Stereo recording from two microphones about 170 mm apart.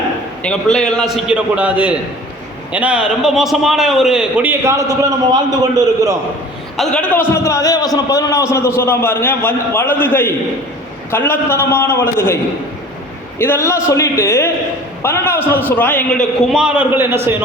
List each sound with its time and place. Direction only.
0.4 s a man's voice: 5° left (ahead or behind); by 6.1 s 25° right (ahead or behind)
6.7 s a man's voice: 10° left (ahead or behind)
13.4 s a man's voice: 15° left (ahead or behind); by 17.2 s 15° right (ahead or behind)